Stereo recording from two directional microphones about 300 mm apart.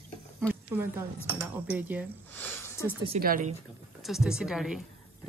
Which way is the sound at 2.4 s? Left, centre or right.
Centre.